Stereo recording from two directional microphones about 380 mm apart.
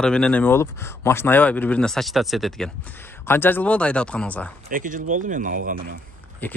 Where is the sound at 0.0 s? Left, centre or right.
Centre.